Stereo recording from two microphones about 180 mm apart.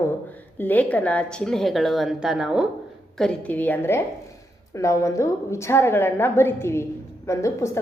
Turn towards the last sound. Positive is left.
turn(degrees=15)  # may be behind; listen again after turning